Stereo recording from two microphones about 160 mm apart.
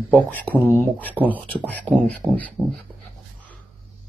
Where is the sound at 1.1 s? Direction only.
10° right (ahead or behind).